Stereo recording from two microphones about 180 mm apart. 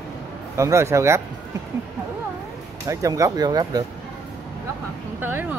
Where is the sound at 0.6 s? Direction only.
15° right (ahead or behind).